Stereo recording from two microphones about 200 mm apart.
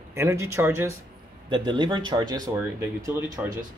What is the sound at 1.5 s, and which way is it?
Speech, 25° right (ahead or behind).